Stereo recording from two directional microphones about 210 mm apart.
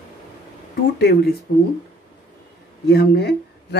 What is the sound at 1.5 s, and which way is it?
Speech, 55° left (ahead or behind).